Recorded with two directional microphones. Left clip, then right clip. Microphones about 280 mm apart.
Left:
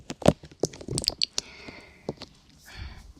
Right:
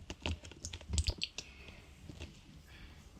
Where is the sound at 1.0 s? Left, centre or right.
Left.